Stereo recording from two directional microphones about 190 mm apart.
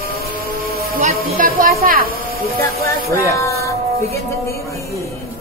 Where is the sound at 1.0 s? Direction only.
45° right (ahead or behind).